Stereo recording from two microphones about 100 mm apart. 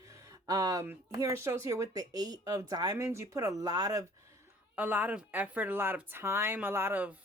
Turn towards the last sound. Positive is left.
turn(degrees=-20)  # may be behind; listen again after turning